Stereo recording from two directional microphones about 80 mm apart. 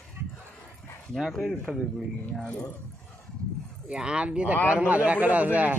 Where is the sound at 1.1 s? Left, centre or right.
Centre.